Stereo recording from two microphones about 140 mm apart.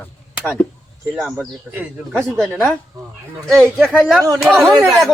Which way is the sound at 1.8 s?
15° right (ahead or behind).